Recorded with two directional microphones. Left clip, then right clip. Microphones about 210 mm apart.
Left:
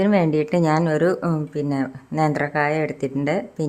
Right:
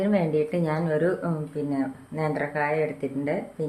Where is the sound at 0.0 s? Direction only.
40° left (ahead or behind).